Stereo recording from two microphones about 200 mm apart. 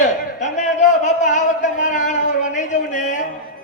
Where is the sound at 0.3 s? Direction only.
35° left (ahead or behind).